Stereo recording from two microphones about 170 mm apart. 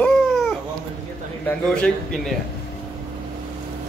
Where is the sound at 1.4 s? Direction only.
5° left (ahead or behind).